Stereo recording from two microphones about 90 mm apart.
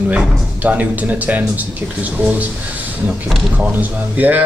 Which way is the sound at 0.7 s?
15° right (ahead or behind).